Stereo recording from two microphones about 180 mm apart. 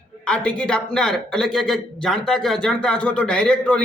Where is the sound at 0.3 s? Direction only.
5° left (ahead or behind).